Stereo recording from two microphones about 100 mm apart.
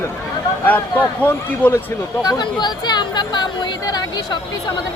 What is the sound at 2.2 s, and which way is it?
Speech, 45° left (ahead or behind).